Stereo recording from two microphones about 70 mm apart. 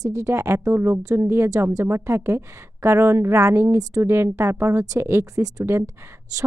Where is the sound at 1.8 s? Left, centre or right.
Right.